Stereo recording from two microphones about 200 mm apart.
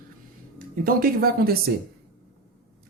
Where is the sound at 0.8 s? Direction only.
45° right (ahead or behind).